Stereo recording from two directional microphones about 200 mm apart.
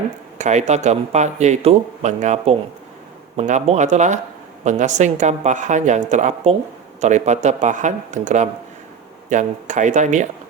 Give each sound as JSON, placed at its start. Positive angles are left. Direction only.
{"t": 0.3, "sound": "speech", "side_deg": -35}